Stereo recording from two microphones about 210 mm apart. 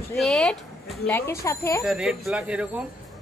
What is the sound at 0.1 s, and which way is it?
A woman's voice, centre (ahead or behind).